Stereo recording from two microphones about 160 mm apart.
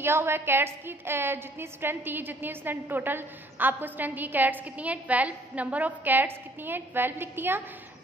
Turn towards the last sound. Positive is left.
turn(degrees=-15)  # may be behind; listen again after turning